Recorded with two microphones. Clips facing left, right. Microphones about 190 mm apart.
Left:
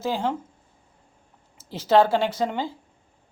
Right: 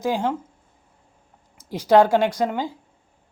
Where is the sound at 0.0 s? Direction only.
15° right (ahead or behind).